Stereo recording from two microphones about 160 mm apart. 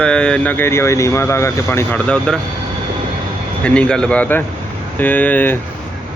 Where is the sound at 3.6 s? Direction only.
5° left (ahead or behind).